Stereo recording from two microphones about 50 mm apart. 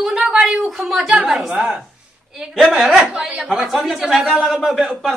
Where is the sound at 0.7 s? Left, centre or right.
Centre.